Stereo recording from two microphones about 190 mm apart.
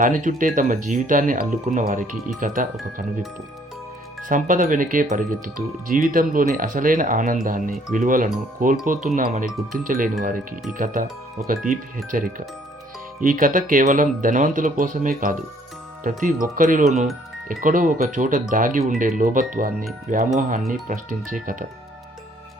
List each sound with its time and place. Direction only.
0.0 s speech: 45° right (ahead or behind)
4.3 s speech: 45° right (ahead or behind)
10.7 s speech: 5° right (ahead or behind)
11.4 s speech: 45° right (ahead or behind)